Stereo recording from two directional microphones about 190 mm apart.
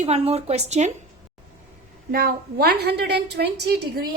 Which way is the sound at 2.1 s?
50° right (ahead or behind).